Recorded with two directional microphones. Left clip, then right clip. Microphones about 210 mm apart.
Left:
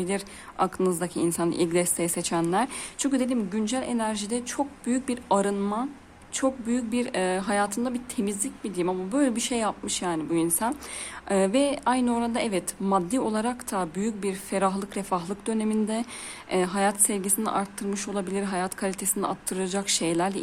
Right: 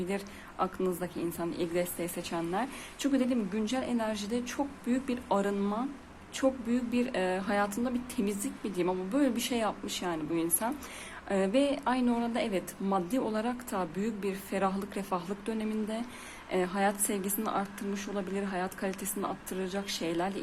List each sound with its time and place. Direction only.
0.6 s a woman's voice: 25° left (ahead or behind)